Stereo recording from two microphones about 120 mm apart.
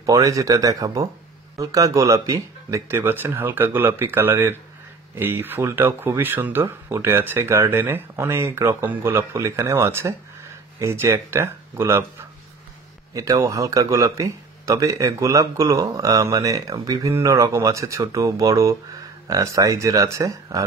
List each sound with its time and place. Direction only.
0.0 s speech: 30° right (ahead or behind)
13.1 s speech: 30° right (ahead or behind)